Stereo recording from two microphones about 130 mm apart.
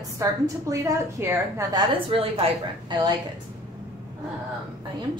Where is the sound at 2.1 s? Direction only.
50° right (ahead or behind).